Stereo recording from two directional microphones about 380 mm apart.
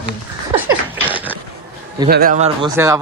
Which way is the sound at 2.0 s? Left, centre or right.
Right.